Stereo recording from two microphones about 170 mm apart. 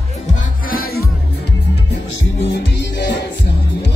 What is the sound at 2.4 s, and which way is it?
Music, 90° left.